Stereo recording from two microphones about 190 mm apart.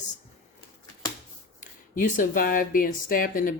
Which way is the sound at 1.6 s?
45° left (ahead or behind).